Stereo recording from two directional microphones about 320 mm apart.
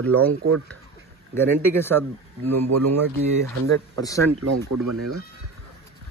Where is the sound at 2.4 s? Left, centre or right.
Right.